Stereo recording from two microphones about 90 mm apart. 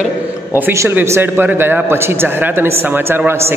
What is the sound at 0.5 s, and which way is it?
A man's voice, 25° right (ahead or behind).